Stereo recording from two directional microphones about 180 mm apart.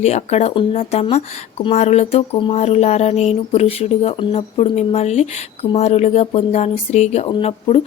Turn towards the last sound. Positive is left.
turn(degrees=35)  # may be behind; listen again after turning